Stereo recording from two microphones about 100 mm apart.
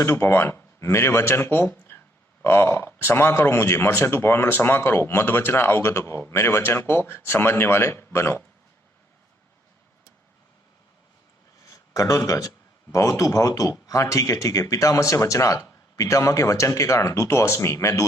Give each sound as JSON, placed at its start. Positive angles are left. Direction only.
{"t": 0.0, "sound": "speech", "side_deg": 25}
{"t": 11.7, "sound": "speech", "side_deg": 35}